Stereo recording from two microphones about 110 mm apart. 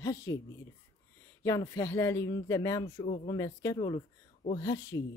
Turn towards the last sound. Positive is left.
turn(degrees=30)  # may be behind; listen again after turning